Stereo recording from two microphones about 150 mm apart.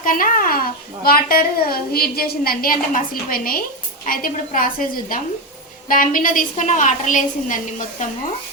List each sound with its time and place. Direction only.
0.0 s a child's voice: 65° left (ahead or behind)